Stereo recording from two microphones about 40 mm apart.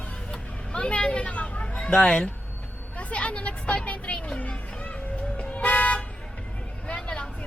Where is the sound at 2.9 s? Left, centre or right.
Left.